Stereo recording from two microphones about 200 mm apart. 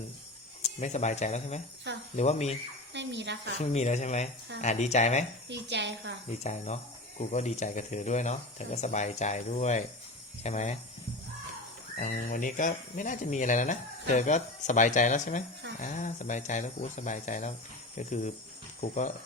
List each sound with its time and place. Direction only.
0.6 s speech: 35° left (ahead or behind)
2.9 s a woman's voice: 60° right (ahead or behind)
3.6 s speech: 35° left (ahead or behind)
5.5 s a woman's voice: 60° right (ahead or behind)
6.4 s speech: 35° left (ahead or behind)
11.9 s speech: 40° left (ahead or behind)